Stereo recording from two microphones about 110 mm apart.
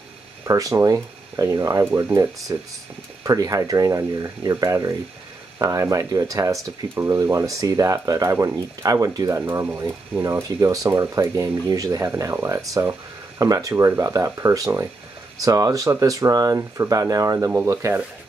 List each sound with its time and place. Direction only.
0.5 s speech: 30° right (ahead or behind)
1.9 s speech: 20° right (ahead or behind)
9.4 s speech: 25° right (ahead or behind)